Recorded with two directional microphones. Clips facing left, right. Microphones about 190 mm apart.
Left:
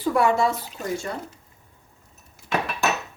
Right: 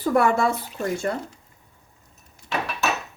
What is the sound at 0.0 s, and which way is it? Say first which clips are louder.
Speech: right 1 dB; 50° right (ahead or behind).